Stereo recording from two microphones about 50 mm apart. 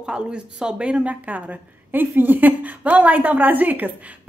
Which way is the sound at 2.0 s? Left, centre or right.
Right.